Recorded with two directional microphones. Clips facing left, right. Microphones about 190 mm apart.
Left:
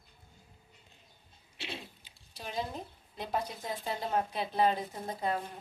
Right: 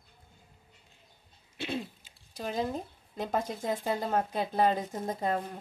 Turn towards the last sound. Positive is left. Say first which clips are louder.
# right 3 dB
turn(degrees=-45)  # may be behind; listen again after turning